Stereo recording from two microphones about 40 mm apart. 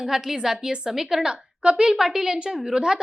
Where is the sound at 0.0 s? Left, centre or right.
Centre.